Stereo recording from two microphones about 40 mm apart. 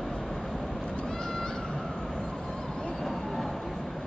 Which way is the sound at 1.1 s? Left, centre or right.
Centre.